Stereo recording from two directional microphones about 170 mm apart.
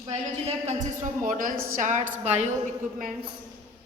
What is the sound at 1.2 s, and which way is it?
A woman's voice, 55° right (ahead or behind).